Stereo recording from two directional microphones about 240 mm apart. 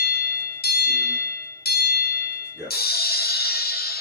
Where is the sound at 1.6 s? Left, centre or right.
Left.